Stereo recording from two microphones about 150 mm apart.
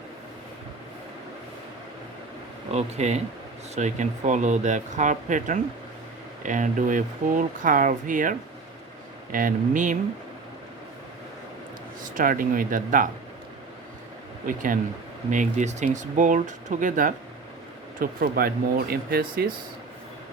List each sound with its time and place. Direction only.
2.7 s speech: 50° right (ahead or behind)
12.1 s speech: 65° right (ahead or behind)
14.4 s speech: 65° right (ahead or behind)
18.0 s speech: 75° right (ahead or behind)